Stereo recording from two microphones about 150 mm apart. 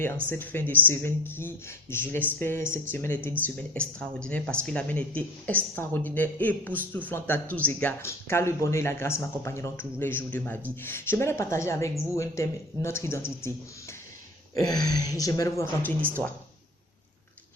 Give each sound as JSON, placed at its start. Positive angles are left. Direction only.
{"t": 0.3, "sound": "speech", "side_deg": 10}